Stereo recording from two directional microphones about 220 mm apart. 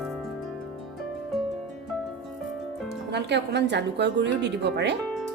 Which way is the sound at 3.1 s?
50° right (ahead or behind).